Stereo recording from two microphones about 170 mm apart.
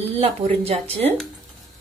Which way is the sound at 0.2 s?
35° right (ahead or behind).